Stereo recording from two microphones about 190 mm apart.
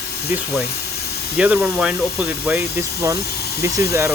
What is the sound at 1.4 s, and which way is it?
Speech, 5° right (ahead or behind).